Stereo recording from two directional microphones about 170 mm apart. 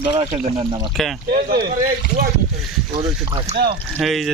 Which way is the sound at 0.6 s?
25° right (ahead or behind).